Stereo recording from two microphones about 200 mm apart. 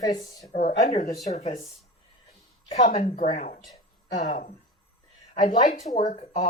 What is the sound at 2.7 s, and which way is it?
Speech, 35° left (ahead or behind).